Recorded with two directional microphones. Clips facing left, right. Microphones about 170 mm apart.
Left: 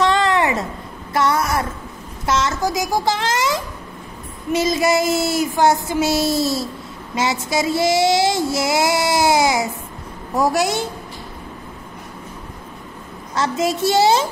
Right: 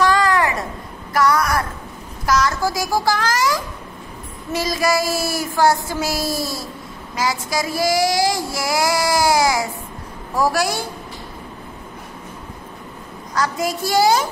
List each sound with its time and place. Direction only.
0.0 s a sound: 25° left (ahead or behind)
1.1 s a woman's voice: 25° left (ahead or behind)
2.2 s child singing: 25° left (ahead or behind)
13.3 s child singing: 25° left (ahead or behind)